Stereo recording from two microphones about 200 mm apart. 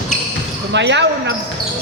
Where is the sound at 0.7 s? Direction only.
60° right (ahead or behind).